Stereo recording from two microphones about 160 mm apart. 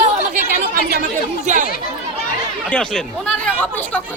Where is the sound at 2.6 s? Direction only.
5° left (ahead or behind).